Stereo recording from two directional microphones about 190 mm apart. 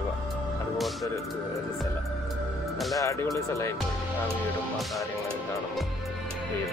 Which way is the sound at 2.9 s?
15° left (ahead or behind).